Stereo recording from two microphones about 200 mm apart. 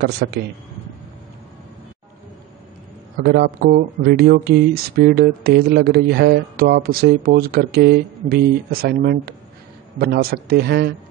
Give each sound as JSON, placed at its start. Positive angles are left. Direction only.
{"t": 0.2, "sound": "speech", "side_deg": -50}
{"t": 3.2, "sound": "speech", "side_deg": -55}